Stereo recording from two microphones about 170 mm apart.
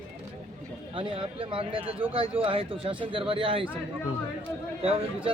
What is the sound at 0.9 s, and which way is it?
Speech, 30° right (ahead or behind).